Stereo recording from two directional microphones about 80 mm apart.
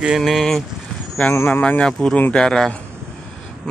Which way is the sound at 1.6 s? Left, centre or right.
Centre.